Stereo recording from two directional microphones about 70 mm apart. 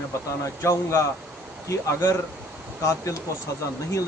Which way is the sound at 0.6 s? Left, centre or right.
Left.